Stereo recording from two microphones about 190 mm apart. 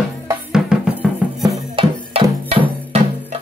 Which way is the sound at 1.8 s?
25° right (ahead or behind).